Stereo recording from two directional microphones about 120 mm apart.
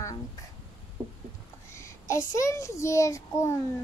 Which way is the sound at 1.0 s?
35° right (ahead or behind).